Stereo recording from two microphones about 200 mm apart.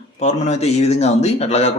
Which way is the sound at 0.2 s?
35° left (ahead or behind).